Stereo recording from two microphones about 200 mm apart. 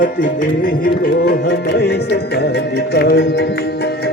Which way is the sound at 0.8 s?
50° left (ahead or behind).